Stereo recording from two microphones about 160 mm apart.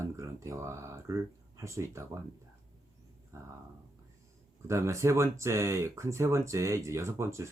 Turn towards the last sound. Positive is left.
turn(degrees=-15)  # may be behind; listen again after turning